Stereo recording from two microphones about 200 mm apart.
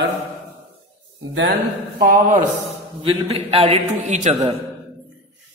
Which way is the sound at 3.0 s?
30° right (ahead or behind).